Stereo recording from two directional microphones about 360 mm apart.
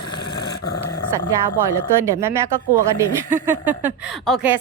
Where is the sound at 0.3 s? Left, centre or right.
Left.